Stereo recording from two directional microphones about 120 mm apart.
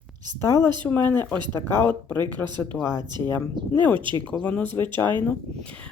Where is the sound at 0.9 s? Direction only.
15° left (ahead or behind).